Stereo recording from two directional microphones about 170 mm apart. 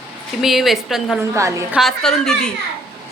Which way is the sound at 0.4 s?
Centre (ahead or behind).